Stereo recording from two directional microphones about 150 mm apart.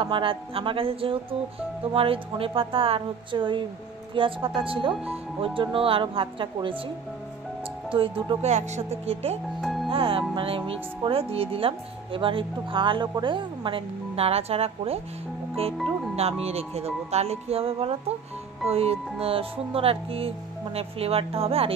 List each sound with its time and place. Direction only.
0.0 s speech: 35° right (ahead or behind)
4.9 s speech: 10° right (ahead or behind)
5.4 s speech: 35° right (ahead or behind)
7.9 s speech: 35° right (ahead or behind)
9.6 s music: centre (ahead or behind)
9.8 s music: 35° right (ahead or behind)
10.3 s speech: 40° right (ahead or behind)
16.2 s speech: 45° right (ahead or behind)